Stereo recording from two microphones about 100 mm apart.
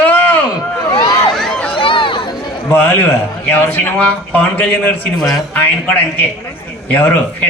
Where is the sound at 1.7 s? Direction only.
60° left (ahead or behind).